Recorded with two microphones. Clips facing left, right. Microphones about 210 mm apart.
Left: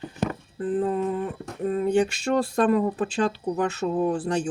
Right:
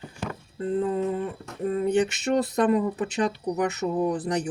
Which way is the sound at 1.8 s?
20° right (ahead or behind).